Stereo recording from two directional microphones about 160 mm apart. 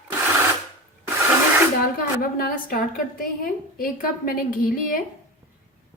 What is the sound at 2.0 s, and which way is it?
A woman's voice, 65° left (ahead or behind).